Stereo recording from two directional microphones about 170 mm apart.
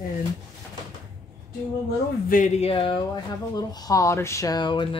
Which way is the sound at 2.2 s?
50° left (ahead or behind).